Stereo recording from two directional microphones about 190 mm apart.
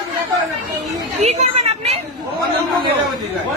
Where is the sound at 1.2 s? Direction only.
35° right (ahead or behind).